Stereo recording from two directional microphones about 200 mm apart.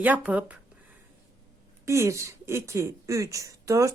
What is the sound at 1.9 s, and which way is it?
Speech, 15° right (ahead or behind).